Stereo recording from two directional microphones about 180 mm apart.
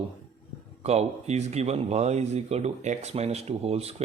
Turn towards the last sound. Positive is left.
turn(degrees=-35)  # may be behind; listen again after turning